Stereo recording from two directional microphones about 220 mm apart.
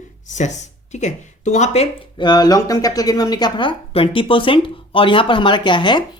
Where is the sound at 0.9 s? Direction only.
30° left (ahead or behind).